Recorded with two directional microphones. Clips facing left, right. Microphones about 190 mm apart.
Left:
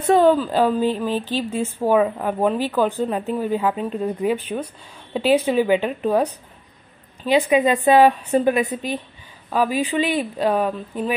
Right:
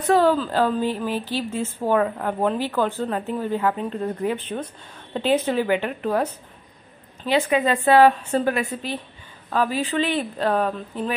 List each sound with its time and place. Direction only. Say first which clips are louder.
0.0 s a woman's voice: left 3 dB; 20° left (ahead or behind)